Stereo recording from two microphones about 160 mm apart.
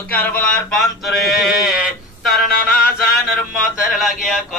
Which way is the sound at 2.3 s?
65° left (ahead or behind).